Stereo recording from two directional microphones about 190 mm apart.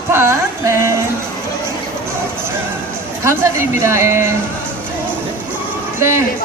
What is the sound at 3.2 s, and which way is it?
Speech, 15° right (ahead or behind).